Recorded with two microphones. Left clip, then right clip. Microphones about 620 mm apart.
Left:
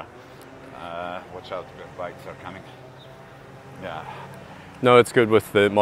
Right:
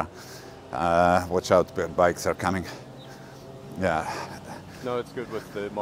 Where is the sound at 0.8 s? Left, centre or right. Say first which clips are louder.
Right 12 dB; right.